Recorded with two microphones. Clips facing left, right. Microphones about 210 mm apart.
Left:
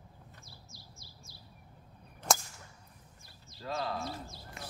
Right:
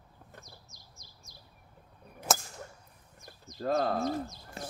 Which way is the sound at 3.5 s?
50° right (ahead or behind).